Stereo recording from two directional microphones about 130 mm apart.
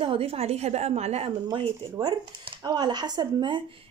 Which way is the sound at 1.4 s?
30° right (ahead or behind).